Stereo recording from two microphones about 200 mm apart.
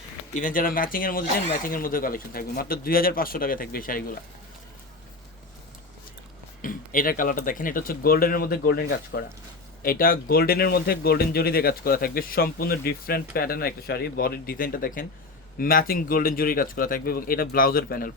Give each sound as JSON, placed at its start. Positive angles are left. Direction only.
{"t": 0.3, "sound": "speech", "side_deg": 40}
{"t": 6.6, "sound": "speech", "side_deg": 45}